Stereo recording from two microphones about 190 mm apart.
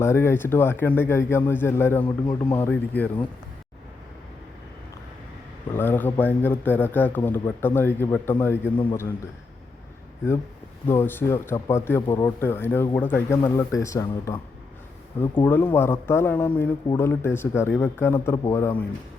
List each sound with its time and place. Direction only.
0.0 s a man's voice: 15° left (ahead or behind)
2.0 s speech: 25° left (ahead or behind)
2.6 s a man's voice: 10° left (ahead or behind)
5.7 s a man's voice: 10° left (ahead or behind)
10.8 s a man's voice: 10° left (ahead or behind)
15.4 s a man's voice: 10° left (ahead or behind)